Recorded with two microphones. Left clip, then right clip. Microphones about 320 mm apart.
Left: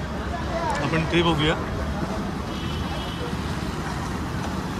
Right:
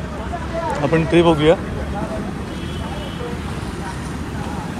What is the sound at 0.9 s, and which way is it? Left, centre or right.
Speech, centre.